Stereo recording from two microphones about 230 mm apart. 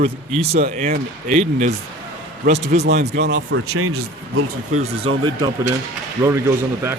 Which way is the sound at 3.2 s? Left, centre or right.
Right.